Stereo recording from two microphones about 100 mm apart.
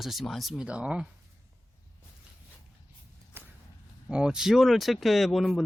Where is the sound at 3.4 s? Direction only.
20° right (ahead or behind).